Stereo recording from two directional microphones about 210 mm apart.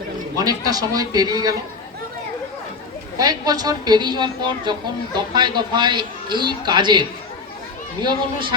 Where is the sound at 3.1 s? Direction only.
20° right (ahead or behind).